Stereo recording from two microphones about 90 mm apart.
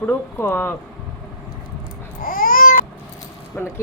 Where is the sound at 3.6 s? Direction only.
20° left (ahead or behind).